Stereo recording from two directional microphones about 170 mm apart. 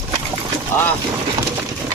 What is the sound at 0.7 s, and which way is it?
Boat, 10° left (ahead or behind).